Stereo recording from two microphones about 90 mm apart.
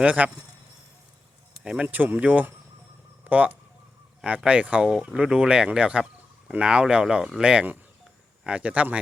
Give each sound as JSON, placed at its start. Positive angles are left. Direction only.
{"t": 0.0, "sound": "speech", "side_deg": -15}
{"t": 1.6, "sound": "speech", "side_deg": -10}